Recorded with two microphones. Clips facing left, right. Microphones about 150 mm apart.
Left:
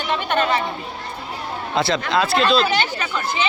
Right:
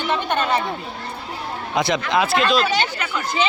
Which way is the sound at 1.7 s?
15° right (ahead or behind).